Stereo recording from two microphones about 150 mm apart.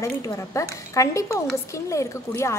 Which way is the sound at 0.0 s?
20° left (ahead or behind).